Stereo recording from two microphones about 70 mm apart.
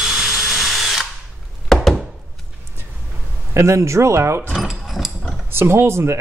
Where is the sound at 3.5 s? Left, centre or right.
Right.